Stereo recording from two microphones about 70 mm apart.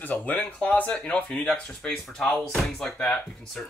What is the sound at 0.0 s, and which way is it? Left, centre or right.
Speech, left.